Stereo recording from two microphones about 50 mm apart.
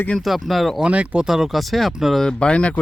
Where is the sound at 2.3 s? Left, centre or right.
Centre.